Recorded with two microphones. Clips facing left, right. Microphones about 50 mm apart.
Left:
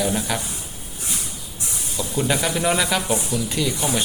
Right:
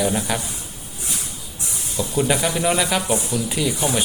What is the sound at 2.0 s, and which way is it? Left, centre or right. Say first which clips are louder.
Speech: right 2 dB; centre.